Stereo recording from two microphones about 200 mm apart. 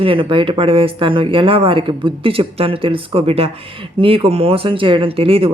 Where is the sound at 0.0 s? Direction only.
25° right (ahead or behind).